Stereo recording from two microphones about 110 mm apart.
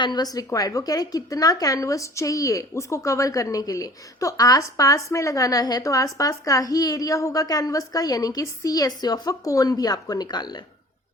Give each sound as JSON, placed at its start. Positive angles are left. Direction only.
{"t": 0.0, "sound": "a woman's voice", "side_deg": 40}